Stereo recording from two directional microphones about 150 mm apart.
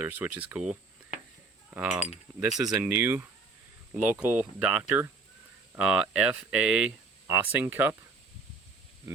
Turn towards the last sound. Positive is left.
turn(degrees=-15)  # may be behind; listen again after turning